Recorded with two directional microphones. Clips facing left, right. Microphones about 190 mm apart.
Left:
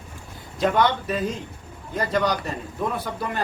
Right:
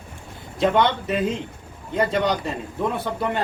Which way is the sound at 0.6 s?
25° right (ahead or behind).